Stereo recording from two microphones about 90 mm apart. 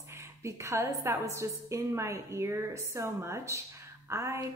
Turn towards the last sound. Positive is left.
turn(degrees=-30)  # may be behind; listen again after turning